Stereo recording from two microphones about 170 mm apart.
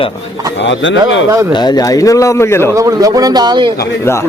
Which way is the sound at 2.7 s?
20° right (ahead or behind).